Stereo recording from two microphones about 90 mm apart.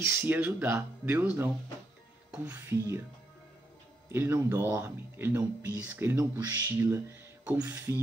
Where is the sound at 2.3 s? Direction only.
15° right (ahead or behind).